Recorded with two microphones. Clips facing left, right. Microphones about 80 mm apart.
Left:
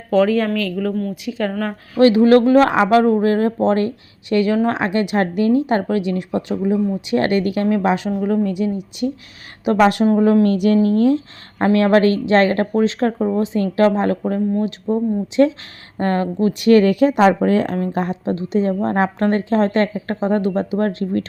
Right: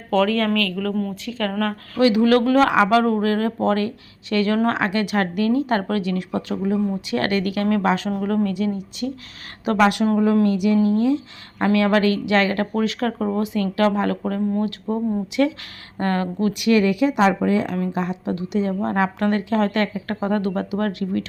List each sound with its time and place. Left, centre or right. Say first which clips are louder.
0.1 s speech: left 3 dB; centre
2.0 s speech: left 5 dB; left; by 8.4 s centre
8.4 s speech: left 3 dB; left
9.7 s speech: left 3 dB; left
10.4 s speech: left 3 dB; left
11.6 s a woman's voice: left 4 dB; left